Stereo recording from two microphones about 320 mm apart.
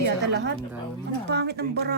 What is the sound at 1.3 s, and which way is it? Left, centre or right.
Speech, right.